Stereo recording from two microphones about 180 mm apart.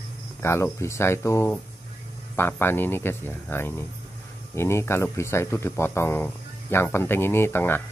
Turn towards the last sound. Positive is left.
turn(degrees=10)  # may be behind; listen again after turning